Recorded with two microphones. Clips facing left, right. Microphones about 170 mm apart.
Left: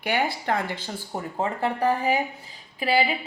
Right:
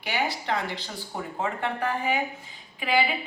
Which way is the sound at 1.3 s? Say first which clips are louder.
Left 3 dB; 35° left (ahead or behind).